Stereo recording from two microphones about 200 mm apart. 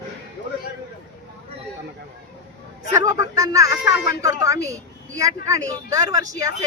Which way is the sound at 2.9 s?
15° right (ahead or behind).